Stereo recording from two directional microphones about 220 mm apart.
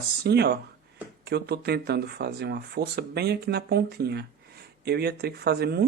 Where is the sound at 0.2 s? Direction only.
50° right (ahead or behind).